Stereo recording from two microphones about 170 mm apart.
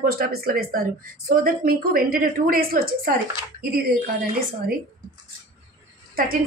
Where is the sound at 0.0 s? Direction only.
60° right (ahead or behind).